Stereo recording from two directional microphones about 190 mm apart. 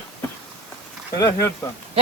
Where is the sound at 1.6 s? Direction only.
15° left (ahead or behind).